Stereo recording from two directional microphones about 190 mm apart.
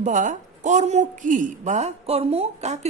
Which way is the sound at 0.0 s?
40° right (ahead or behind).